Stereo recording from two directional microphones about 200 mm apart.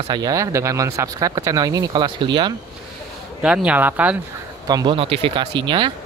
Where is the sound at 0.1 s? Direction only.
20° right (ahead or behind).